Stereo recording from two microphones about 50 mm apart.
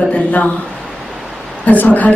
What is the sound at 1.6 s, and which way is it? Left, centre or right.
Speech, left.